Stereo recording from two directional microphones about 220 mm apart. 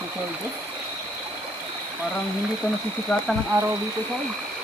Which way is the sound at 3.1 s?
5° left (ahead or behind).